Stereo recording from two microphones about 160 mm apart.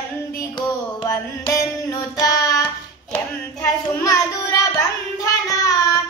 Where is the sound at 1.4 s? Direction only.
20° left (ahead or behind).